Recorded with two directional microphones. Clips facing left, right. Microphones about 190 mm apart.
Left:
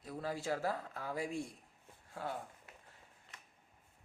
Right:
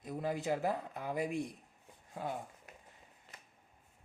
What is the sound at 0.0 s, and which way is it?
Speech, 20° right (ahead or behind).